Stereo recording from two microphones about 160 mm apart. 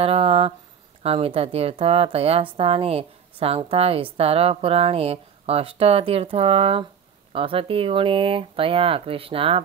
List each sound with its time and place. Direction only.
0.0 s a woman's voice: 40° right (ahead or behind)